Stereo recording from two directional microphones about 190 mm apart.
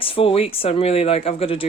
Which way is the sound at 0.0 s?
30° left (ahead or behind).